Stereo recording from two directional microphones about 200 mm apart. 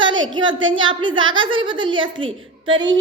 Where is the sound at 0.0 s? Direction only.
70° right (ahead or behind).